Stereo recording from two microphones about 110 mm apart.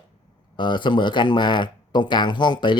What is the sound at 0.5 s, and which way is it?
Speech, 45° left (ahead or behind).